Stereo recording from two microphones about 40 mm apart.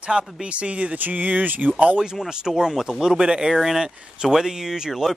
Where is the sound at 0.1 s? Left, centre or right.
Centre.